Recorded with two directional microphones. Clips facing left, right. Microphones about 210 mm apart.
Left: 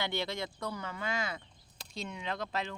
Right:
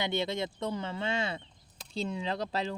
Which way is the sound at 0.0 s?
20° right (ahead or behind).